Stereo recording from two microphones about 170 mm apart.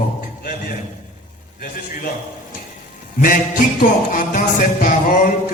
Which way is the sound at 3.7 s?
50° left (ahead or behind).